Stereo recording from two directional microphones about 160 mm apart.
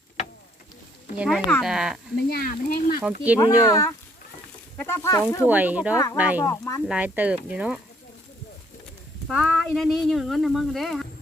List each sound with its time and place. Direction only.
1.1 s speech: 5° right (ahead or behind)
2.3 s speech: 60° left (ahead or behind)
3.0 s speech: 10° right (ahead or behind)
3.3 s speech: 20° left (ahead or behind)
5.5 s speech: 10° right (ahead or behind)
6.4 s speech: 20° left (ahead or behind)
6.8 s speech: 10° right (ahead or behind)
9.2 s speech: centre (ahead or behind)